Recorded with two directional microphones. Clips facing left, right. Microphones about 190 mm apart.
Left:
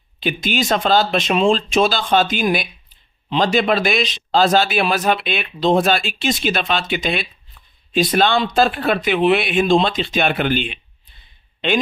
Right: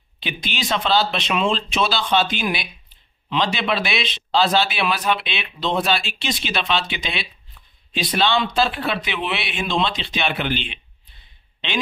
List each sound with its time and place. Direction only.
0.2 s a man's voice: 45° left (ahead or behind)